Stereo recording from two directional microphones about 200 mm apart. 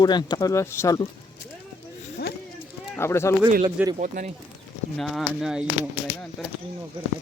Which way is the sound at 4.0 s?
40° right (ahead or behind).